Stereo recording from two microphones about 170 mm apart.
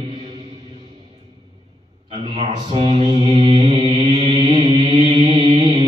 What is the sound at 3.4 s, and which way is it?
Music, 35° right (ahead or behind).